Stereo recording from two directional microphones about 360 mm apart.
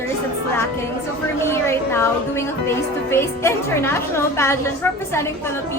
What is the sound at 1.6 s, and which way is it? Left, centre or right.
A woman's voice, centre.